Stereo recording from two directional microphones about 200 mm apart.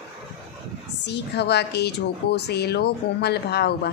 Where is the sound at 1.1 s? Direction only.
55° left (ahead or behind).